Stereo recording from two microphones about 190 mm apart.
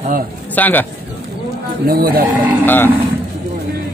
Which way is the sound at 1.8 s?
50° right (ahead or behind).